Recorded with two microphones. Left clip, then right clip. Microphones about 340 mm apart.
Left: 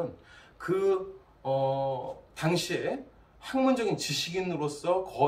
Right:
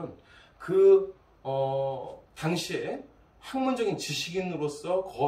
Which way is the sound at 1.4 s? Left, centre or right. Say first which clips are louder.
Left 1 dB; centre.